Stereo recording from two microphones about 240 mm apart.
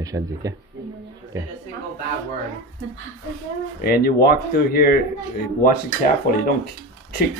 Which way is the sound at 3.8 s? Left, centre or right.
Left.